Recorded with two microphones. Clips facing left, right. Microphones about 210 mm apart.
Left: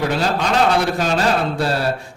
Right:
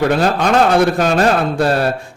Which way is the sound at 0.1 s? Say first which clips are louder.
Right 5 dB; 55° right (ahead or behind).